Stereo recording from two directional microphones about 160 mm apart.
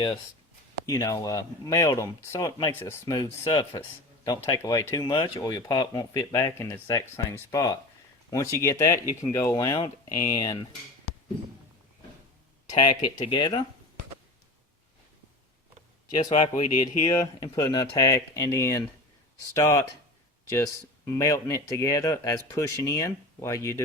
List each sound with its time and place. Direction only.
0.9 s speech: 20° left (ahead or behind)
12.6 s speech: 25° left (ahead or behind)
16.6 s speech: 45° left (ahead or behind)
17.0 s speech: 25° left (ahead or behind)
20.5 s speech: 15° left (ahead or behind)